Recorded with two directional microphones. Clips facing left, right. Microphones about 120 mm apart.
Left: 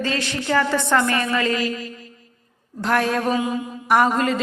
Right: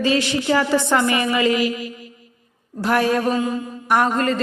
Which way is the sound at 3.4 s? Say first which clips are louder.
Right 1 dB; 15° left (ahead or behind).